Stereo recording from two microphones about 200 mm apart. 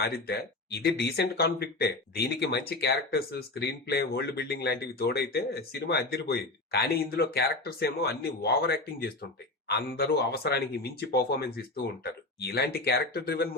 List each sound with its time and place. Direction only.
0.0 s speech: 50° left (ahead or behind)